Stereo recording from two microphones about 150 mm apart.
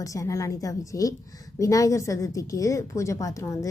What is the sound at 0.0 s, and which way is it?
A woman's voice, 20° left (ahead or behind).